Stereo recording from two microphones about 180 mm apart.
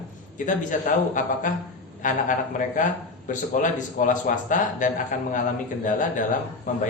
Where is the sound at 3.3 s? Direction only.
45° left (ahead or behind).